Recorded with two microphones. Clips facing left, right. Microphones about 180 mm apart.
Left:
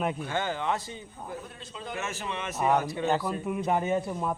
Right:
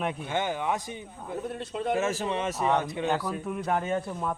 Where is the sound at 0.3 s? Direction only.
20° right (ahead or behind).